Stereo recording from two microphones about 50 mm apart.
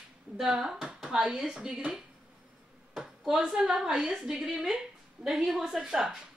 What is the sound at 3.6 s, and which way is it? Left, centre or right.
A woman's voice, centre.